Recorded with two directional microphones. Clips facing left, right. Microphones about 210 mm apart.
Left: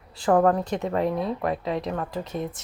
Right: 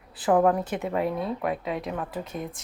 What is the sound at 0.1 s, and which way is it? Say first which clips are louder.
Speech: left 1 dB; 5° right (ahead or behind).